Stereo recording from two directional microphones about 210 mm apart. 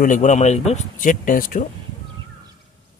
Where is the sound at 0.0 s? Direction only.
35° left (ahead or behind).